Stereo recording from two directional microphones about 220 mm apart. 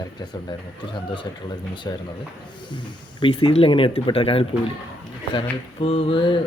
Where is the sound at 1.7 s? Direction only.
20° left (ahead or behind).